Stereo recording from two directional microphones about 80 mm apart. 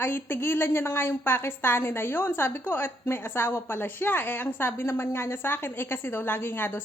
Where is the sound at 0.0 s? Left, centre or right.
Left.